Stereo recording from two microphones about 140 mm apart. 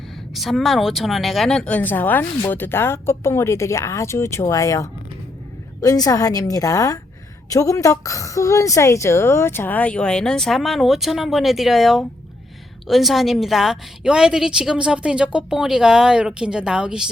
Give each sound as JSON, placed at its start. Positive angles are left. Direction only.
{"t": 0.3, "sound": "a woman's voice", "side_deg": 0}